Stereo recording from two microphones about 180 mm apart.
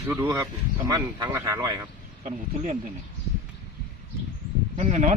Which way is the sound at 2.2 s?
45° right (ahead or behind).